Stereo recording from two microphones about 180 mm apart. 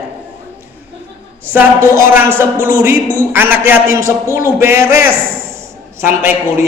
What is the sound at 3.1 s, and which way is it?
A man's voice, 15° right (ahead or behind).